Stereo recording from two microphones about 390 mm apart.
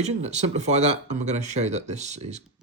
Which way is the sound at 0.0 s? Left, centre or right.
Centre.